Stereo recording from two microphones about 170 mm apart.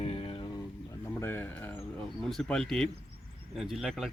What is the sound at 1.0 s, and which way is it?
Speech, 15° left (ahead or behind).